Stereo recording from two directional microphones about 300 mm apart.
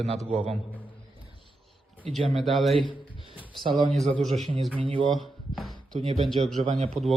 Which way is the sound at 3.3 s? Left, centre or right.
Centre.